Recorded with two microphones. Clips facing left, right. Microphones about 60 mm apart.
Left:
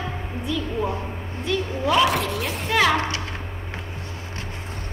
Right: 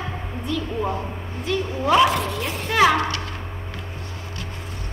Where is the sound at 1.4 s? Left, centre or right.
Centre.